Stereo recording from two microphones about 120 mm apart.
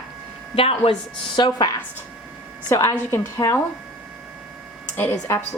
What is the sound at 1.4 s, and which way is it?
Speech, 40° left (ahead or behind).